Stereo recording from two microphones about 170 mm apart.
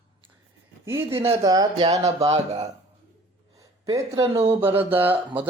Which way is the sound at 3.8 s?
20° right (ahead or behind).